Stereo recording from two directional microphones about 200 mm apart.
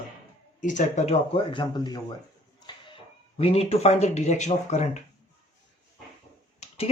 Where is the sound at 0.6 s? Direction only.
40° left (ahead or behind).